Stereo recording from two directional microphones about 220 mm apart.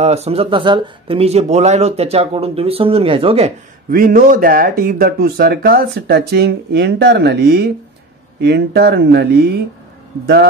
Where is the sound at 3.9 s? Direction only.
40° right (ahead or behind).